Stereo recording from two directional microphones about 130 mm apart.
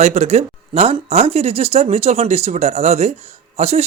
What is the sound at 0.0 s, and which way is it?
Speech, 60° right (ahead or behind).